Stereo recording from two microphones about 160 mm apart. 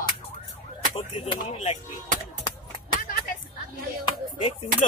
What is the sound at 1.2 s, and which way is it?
Speech, 35° left (ahead or behind).